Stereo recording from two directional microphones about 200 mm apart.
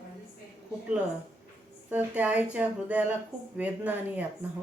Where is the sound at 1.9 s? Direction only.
5° right (ahead or behind).